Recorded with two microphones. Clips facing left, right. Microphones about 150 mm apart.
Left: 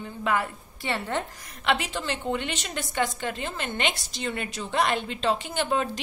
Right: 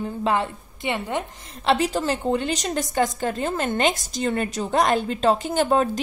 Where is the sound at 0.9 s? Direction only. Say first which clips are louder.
Right 2 dB; 15° right (ahead or behind).